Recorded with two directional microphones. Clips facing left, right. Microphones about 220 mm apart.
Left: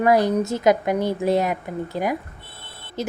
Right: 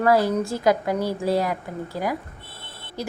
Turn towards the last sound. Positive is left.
turn(degrees=20)  # may be behind; listen again after turning